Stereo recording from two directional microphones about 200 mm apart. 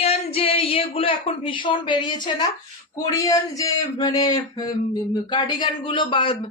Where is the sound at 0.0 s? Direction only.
30° left (ahead or behind).